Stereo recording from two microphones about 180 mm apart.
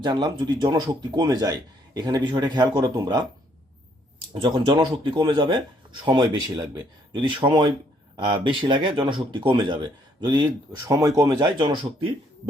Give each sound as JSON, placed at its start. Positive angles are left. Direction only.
{"t": 0.0, "sound": "speech", "side_deg": -25}
{"t": 4.4, "sound": "speech", "side_deg": -25}